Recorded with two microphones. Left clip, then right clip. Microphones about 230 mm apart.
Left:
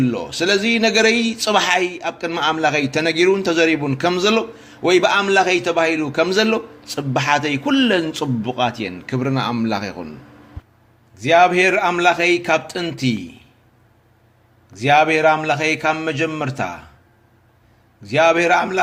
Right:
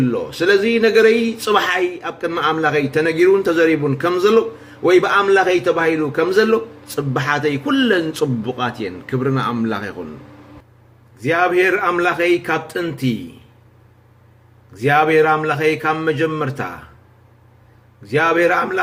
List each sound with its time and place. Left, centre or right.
0.1 s speech: left
11.2 s speech: left
14.7 s speech: left
18.0 s speech: left